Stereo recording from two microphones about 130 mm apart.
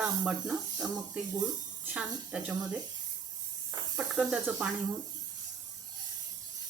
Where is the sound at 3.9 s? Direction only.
10° right (ahead or behind).